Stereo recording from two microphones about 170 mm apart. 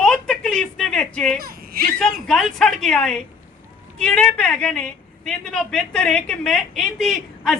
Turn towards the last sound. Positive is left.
turn(degrees=0)  # may be behind; listen again after turning